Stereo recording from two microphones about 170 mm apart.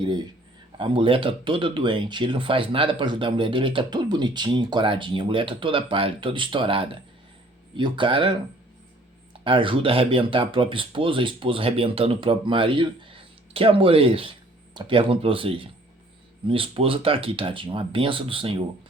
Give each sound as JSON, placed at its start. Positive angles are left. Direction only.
{"t": 0.8, "sound": "speech", "side_deg": -30}